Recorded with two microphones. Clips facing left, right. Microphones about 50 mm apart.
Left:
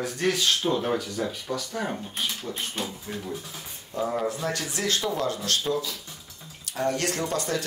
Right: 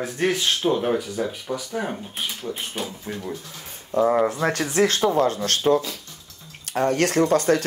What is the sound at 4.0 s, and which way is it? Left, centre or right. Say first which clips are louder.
Speech: right 8 dB; right.